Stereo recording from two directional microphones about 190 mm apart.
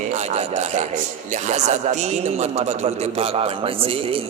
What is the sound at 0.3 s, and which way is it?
A man's voice, 35° right (ahead or behind).